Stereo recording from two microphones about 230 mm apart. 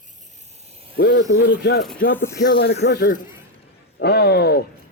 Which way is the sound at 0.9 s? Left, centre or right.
Left.